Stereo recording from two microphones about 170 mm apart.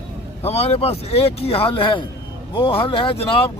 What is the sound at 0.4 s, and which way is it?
Speech, 40° left (ahead or behind).